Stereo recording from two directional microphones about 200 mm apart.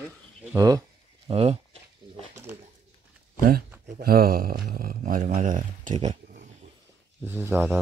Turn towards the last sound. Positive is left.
turn(degrees=-10)  # may be behind; listen again after turning